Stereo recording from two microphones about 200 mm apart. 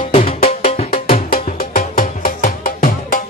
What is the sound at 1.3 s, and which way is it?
Music, 45° left (ahead or behind).